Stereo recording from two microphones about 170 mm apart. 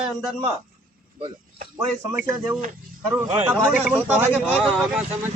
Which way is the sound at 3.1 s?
10° right (ahead or behind).